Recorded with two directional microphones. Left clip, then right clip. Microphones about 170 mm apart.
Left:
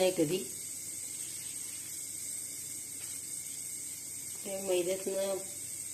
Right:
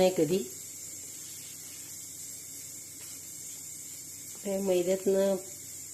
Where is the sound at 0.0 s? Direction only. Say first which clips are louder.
Right 4 dB; 60° right (ahead or behind).